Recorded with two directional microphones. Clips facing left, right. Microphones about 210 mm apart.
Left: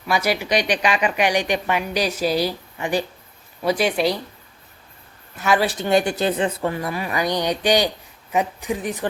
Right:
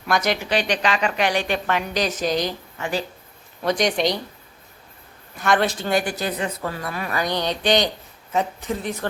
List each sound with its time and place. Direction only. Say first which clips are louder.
0.1 s a woman's voice: left 1 dB; 10° left (ahead or behind)
5.4 s speech: left 1 dB; 5° left (ahead or behind)
5.8 s a woman's voice: left 4 dB; 25° left (ahead or behind)